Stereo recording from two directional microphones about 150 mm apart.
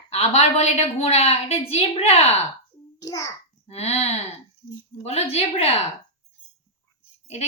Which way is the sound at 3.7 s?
45° left (ahead or behind).